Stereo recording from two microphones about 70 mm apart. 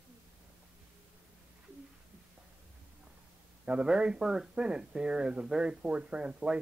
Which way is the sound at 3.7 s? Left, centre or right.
Centre.